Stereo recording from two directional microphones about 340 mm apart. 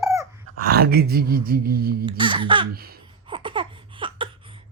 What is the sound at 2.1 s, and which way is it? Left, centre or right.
Speech, centre.